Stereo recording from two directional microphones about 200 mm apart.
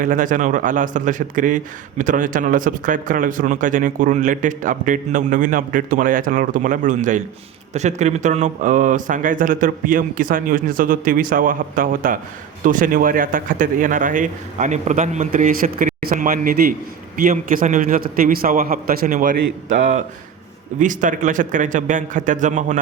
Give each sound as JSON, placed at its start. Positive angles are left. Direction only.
{"t": 0.0, "sound": "a man's voice", "side_deg": -40}